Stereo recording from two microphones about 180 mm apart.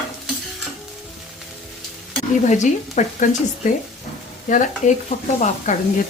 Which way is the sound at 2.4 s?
40° left (ahead or behind).